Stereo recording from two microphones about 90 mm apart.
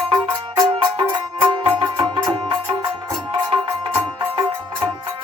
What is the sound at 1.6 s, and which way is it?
Music, 65° right (ahead or behind).